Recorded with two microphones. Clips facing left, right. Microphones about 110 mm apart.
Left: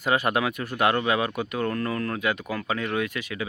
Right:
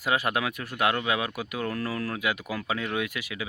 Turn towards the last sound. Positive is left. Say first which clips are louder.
# left 3 dB
turn(degrees=-10)  # may be behind; listen again after turning